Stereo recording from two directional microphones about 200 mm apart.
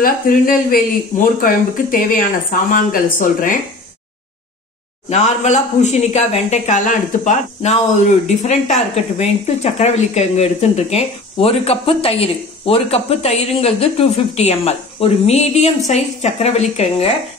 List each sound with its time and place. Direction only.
0.0 s speech: 45° left (ahead or behind)
5.1 s speech: 35° left (ahead or behind)